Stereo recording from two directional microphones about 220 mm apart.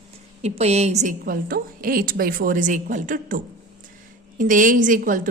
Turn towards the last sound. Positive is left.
turn(degrees=-40)  # may be behind; listen again after turning